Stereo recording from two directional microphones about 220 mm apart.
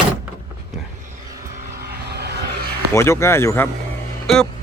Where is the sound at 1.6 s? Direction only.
45° right (ahead or behind).